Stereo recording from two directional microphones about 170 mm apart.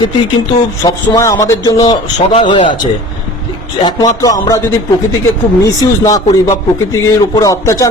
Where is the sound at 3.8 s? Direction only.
20° left (ahead or behind).